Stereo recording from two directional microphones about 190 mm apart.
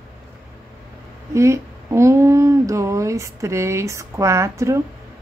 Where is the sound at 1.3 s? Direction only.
15° right (ahead or behind).